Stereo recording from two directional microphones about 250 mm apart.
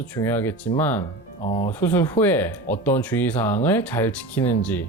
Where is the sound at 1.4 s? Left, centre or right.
Left.